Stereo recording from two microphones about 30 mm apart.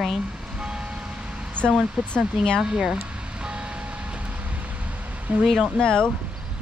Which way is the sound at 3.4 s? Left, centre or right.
Right.